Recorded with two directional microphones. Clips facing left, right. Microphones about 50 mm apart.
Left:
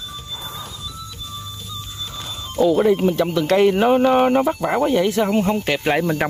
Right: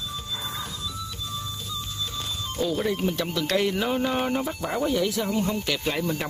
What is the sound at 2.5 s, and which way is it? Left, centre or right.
Speech, centre.